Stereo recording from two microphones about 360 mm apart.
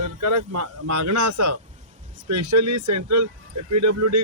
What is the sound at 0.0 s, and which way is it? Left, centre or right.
Speech, right.